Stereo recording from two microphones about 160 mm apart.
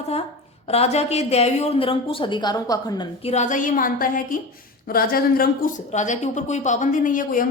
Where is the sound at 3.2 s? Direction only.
45° left (ahead or behind).